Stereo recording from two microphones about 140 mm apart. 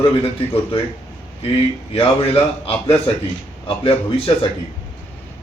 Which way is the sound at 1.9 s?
40° left (ahead or behind).